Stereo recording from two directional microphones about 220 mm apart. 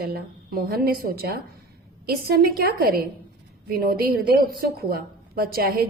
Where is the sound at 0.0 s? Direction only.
40° right (ahead or behind).